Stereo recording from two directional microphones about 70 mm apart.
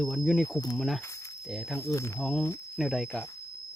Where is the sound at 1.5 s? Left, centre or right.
Centre.